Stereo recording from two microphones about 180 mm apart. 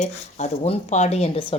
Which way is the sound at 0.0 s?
40° left (ahead or behind).